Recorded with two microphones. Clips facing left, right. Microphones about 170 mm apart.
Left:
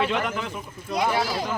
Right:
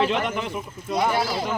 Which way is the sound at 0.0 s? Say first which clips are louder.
Right 2 dB; 25° right (ahead or behind).